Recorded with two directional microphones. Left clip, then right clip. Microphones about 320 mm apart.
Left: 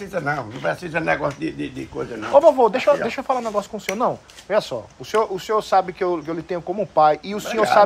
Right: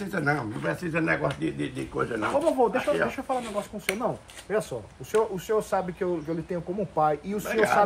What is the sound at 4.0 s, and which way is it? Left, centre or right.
Speech, centre.